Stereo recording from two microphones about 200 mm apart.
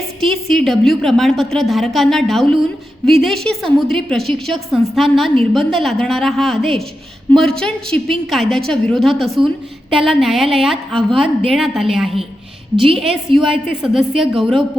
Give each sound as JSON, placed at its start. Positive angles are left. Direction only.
{"t": 0.2, "sound": "a woman's voice", "side_deg": 0}
{"t": 10.9, "sound": "a woman's voice", "side_deg": -25}
{"t": 11.4, "sound": "a woman's voice", "side_deg": 0}